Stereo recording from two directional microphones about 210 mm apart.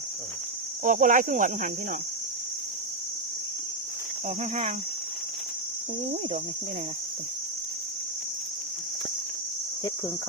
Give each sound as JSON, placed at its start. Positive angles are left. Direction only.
{"t": 0.9, "sound": "speech", "side_deg": -40}